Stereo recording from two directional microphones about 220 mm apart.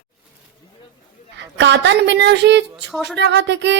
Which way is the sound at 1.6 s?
50° right (ahead or behind).